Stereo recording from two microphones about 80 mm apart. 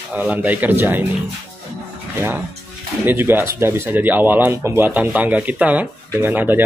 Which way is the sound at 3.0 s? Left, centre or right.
Right.